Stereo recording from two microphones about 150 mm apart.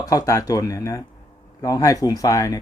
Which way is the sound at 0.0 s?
25° left (ahead or behind).